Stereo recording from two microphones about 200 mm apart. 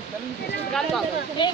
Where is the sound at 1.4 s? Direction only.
25° left (ahead or behind).